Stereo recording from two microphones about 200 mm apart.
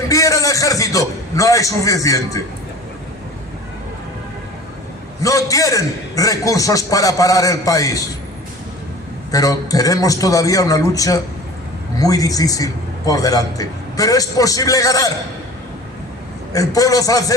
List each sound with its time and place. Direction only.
0.1 s a sound: 15° left (ahead or behind)
5.2 s a man's voice: 15° left (ahead or behind)
9.3 s a man's voice: 15° left (ahead or behind)
16.5 s a man's voice: 15° left (ahead or behind)